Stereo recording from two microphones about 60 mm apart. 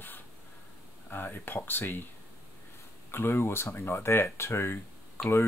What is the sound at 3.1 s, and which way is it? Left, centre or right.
Speech, left.